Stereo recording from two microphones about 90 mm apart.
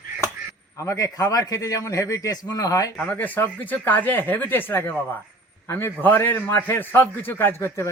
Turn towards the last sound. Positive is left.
turn(degrees=30)  # may be behind; listen again after turning